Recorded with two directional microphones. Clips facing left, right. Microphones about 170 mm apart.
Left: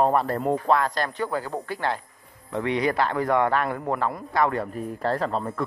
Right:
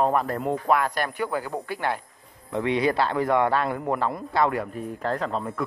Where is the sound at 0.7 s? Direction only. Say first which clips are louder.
Right 2 dB; 15° right (ahead or behind).